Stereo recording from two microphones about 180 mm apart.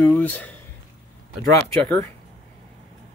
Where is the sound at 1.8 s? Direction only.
10° left (ahead or behind).